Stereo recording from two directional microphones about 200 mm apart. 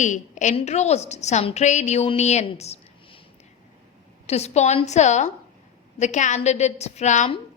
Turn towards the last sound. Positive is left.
turn(degrees=35)  # may be behind; listen again after turning